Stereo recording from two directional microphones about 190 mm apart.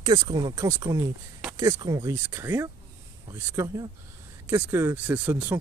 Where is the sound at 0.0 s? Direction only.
20° right (ahead or behind).